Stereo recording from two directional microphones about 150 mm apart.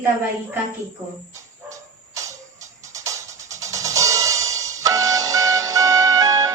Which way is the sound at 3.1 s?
20° right (ahead or behind).